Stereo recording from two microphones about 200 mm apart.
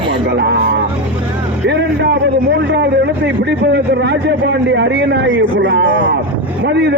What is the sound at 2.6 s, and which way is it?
A man's voice, 60° right (ahead or behind).